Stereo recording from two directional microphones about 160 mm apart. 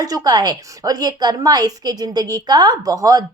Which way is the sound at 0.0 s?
25° right (ahead or behind).